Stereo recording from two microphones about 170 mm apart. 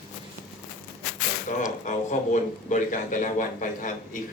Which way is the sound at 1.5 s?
45° left (ahead or behind).